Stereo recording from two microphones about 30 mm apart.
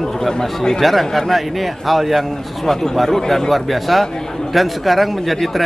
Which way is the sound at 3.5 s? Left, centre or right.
Centre.